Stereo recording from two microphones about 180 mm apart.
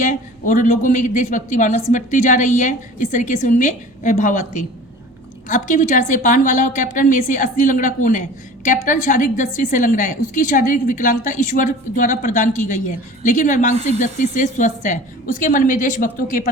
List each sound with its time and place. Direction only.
0.0 s speech: 45° left (ahead or behind)
13.7 s speech: 35° right (ahead or behind)
14.0 s speech: 45° left (ahead or behind)